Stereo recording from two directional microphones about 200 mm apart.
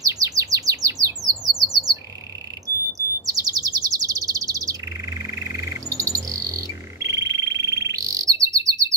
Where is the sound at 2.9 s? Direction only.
15° right (ahead or behind).